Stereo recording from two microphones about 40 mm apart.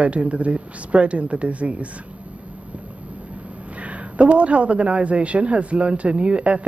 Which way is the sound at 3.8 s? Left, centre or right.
Right.